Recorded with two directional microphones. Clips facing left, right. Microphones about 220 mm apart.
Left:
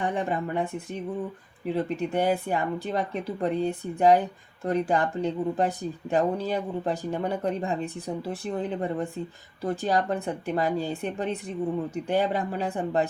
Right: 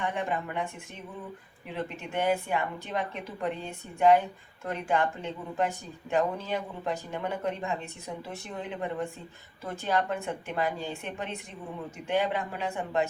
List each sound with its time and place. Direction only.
0.0 s speech: 35° left (ahead or behind)